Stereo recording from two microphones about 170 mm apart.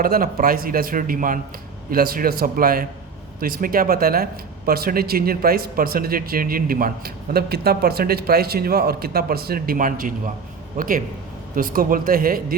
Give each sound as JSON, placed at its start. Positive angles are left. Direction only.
{"t": 0.0, "sound": "speech", "side_deg": -60}